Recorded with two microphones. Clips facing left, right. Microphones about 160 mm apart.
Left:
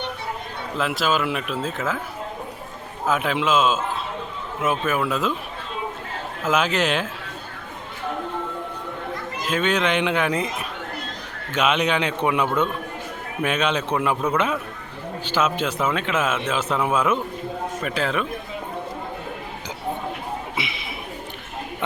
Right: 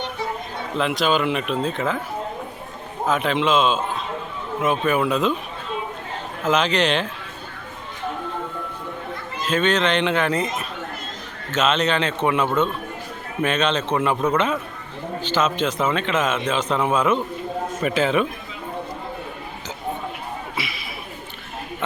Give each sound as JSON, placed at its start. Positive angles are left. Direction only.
{"t": 0.8, "sound": "speech", "side_deg": 5}
{"t": 3.1, "sound": "speech", "side_deg": 5}
{"t": 6.4, "sound": "a man's voice", "side_deg": 5}
{"t": 9.4, "sound": "a man's voice", "side_deg": 10}
{"t": 20.6, "sound": "a sound", "side_deg": 25}